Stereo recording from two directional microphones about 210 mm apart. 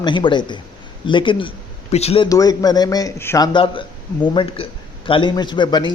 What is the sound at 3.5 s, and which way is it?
A man's voice, 25° left (ahead or behind).